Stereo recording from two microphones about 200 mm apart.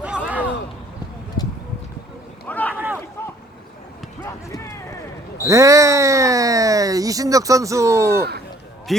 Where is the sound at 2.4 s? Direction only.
10° left (ahead or behind).